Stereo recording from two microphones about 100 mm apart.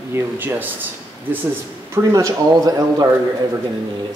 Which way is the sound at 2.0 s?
30° right (ahead or behind).